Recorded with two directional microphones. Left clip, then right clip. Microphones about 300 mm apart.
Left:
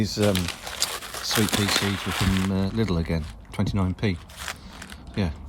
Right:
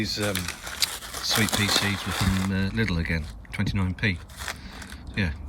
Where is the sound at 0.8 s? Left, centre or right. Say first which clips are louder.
Right 1 dB; centre.